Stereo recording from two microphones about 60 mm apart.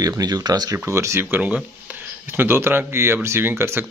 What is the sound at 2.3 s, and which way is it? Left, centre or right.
Speech, right.